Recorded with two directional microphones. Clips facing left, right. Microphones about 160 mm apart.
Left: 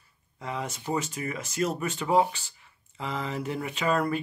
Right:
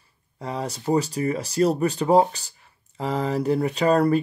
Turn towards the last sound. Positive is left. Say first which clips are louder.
# right 8 dB
turn(degrees=-35)  # may be behind; listen again after turning